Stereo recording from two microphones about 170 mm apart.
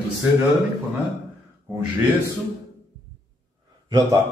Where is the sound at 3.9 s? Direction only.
25° right (ahead or behind).